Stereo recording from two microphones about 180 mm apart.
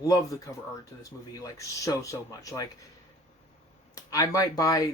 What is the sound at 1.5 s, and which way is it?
Speech, 20° left (ahead or behind).